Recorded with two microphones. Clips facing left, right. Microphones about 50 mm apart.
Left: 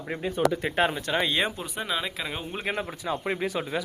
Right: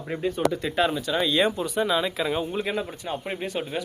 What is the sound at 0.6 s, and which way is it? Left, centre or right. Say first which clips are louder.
Speech: right 1 dB; left.